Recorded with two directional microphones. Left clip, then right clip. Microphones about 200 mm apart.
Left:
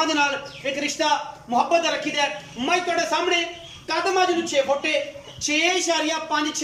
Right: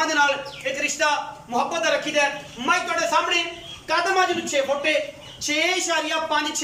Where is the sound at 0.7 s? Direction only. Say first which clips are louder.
Even; 25° left (ahead or behind).